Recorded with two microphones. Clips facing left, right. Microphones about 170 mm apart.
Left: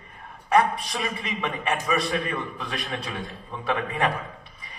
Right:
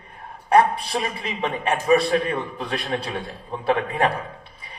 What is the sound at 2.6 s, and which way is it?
A man's voice, 35° right (ahead or behind).